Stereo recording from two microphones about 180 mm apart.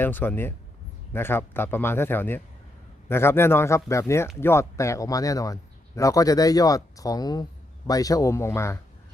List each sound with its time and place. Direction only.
0.0 s a man's voice: 10° left (ahead or behind)